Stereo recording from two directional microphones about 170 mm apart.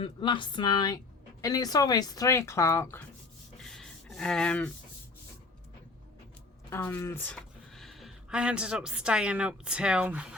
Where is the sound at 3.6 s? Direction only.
Centre (ahead or behind).